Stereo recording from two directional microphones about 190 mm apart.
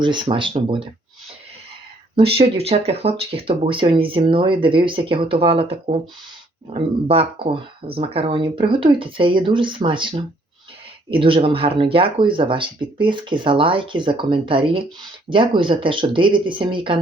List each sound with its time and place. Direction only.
0.0 s speech: 25° right (ahead or behind)
2.1 s speech: 30° right (ahead or behind)